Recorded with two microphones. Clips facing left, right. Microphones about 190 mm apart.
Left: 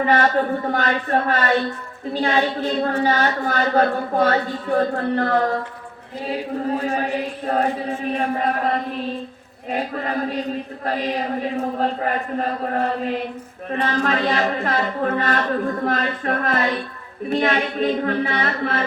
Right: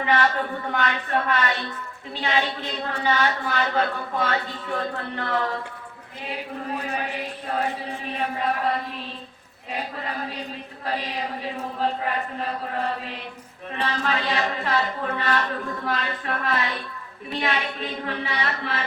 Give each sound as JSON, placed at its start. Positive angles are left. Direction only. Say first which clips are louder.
{"t": 0.0, "sound": "a woman's voice", "louder": "left 5 dB", "side_deg": 40}
{"t": 13.8, "sound": "a woman's voice", "louder": "left 5 dB", "side_deg": 45}